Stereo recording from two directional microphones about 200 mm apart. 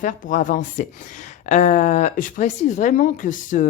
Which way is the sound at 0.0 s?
40° left (ahead or behind).